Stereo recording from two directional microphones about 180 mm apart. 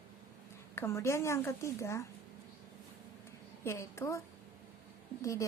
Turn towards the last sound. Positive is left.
turn(degrees=15)  # may be behind; listen again after turning